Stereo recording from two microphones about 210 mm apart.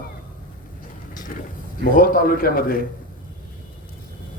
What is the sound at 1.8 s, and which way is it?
A man's voice, 45° left (ahead or behind).